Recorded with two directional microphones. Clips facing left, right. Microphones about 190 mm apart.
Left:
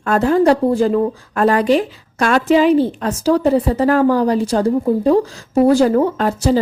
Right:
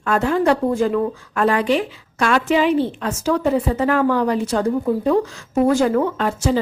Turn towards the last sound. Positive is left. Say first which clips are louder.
# left 4 dB
turn(degrees=40)  # may be behind; listen again after turning